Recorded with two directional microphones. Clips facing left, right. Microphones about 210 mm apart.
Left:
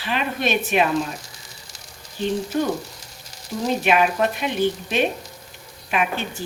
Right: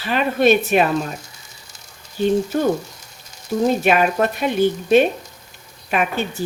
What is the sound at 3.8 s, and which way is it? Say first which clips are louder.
Speech: right 2 dB; 45° right (ahead or behind).